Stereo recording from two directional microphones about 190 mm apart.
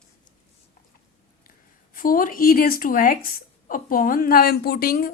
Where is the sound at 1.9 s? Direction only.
45° left (ahead or behind).